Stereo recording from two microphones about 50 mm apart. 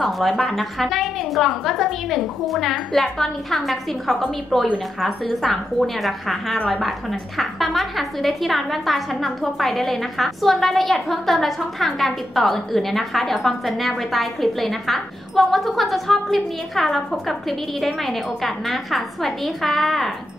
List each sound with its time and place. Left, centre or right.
0.0 s a woman's voice: centre